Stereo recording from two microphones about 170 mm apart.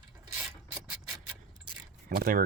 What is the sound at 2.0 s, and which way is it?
Speech, 55° right (ahead or behind).